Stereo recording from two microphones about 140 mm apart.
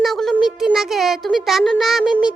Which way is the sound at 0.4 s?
5° right (ahead or behind).